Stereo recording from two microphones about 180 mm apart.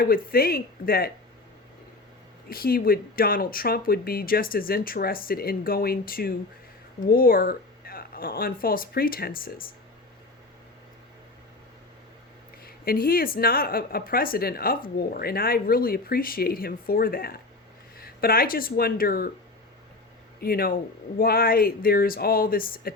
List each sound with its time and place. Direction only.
0.0 s speech: 55° left (ahead or behind)
2.5 s speech: 55° left (ahead or behind)
12.6 s speech: 55° left (ahead or behind)
20.4 s speech: 55° left (ahead or behind)